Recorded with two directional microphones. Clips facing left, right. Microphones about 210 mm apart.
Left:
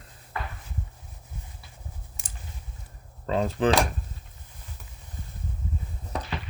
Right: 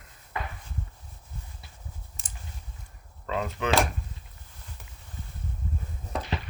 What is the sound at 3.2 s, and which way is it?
Cutlery, 30° left (ahead or behind).